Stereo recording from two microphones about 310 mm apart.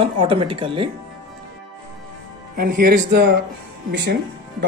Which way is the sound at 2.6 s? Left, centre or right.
Right.